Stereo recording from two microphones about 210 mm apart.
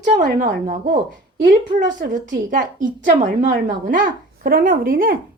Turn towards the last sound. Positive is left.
turn(degrees=-40)  # may be behind; listen again after turning